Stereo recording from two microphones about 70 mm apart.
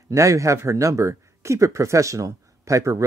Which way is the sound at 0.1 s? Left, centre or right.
Right.